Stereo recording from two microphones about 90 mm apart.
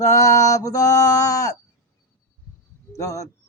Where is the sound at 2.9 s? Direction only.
35° left (ahead or behind).